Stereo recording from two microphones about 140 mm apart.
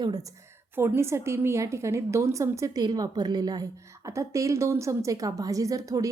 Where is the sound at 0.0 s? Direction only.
25° right (ahead or behind).